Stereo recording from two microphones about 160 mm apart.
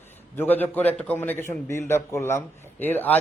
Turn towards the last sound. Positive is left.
turn(degrees=10)  # may be behind; listen again after turning